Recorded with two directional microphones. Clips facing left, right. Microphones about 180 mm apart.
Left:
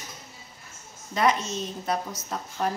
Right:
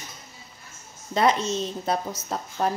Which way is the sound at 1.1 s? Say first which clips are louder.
Right 3 dB; 30° right (ahead or behind).